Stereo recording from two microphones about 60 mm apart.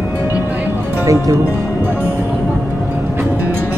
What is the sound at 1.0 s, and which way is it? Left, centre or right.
Speech, right.